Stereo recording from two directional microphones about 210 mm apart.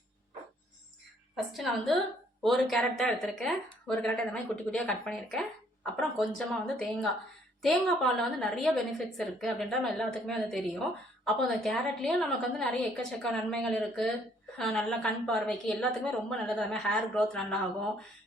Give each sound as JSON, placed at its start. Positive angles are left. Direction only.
{"t": 1.5, "sound": "a woman's voice", "side_deg": 0}